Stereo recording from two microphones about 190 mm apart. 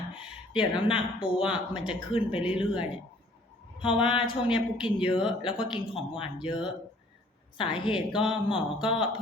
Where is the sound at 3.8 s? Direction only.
30° left (ahead or behind).